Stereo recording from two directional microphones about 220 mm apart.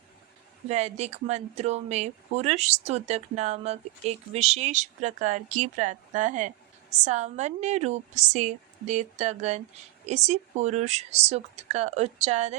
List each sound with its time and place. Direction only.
0.7 s speech: 30° right (ahead or behind)